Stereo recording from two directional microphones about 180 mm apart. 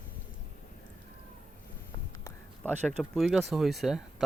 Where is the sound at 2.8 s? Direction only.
Centre (ahead or behind).